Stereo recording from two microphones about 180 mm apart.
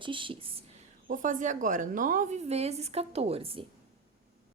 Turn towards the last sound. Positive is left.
turn(degrees=-30)  # may be behind; listen again after turning